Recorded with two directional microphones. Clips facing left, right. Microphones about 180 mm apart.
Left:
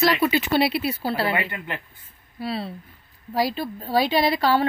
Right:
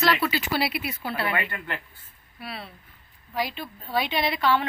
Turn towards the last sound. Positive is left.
turn(degrees=35)  # may be behind; listen again after turning